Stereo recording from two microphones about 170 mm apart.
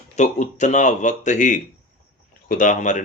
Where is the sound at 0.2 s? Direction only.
45° left (ahead or behind).